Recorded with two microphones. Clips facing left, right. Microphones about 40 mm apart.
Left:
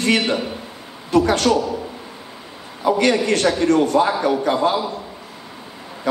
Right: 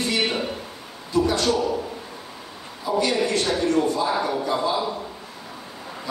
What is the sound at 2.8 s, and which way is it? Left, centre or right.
A man's voice, left.